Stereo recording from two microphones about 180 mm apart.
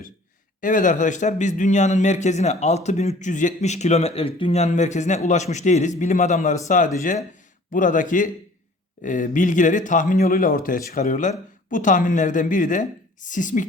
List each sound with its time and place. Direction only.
0.6 s a man's voice: 45° left (ahead or behind)